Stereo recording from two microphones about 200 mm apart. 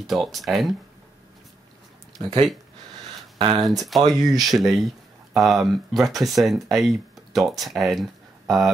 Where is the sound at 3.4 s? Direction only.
25° right (ahead or behind).